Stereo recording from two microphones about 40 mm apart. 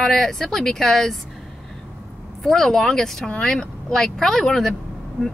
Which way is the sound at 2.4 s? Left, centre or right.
Centre.